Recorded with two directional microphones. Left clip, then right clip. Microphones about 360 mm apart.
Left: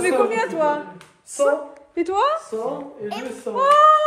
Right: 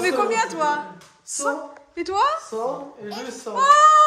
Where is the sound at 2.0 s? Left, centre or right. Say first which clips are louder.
Left 1 dB; centre.